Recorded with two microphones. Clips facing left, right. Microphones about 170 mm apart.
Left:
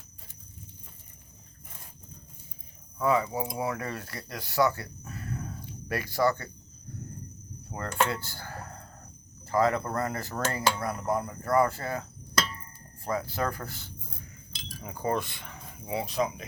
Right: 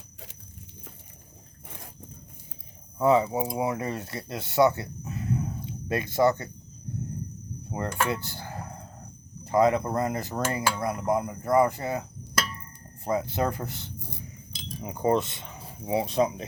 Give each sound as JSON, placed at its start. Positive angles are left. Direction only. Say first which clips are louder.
{"t": 3.0, "sound": "speech", "louder": "right 5 dB", "side_deg": -25}
{"t": 6.9, "sound": "heart sounds", "louder": "right 8 dB", "side_deg": -20}
{"t": 7.7, "sound": "cutlery", "louder": "right 1 dB", "side_deg": -20}
{"t": 9.4, "sound": "speech", "louder": "right 4 dB", "side_deg": -20}
{"t": 13.1, "sound": "speech", "louder": "right 4 dB", "side_deg": -20}